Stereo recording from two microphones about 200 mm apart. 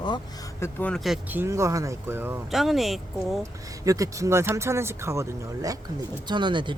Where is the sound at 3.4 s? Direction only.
15° right (ahead or behind).